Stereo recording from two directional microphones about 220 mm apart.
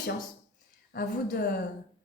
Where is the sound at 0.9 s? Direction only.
45° left (ahead or behind).